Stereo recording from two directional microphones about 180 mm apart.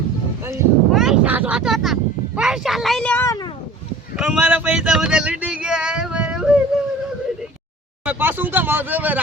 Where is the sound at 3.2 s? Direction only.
20° left (ahead or behind).